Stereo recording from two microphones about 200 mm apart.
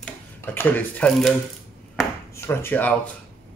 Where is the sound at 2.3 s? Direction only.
10° left (ahead or behind).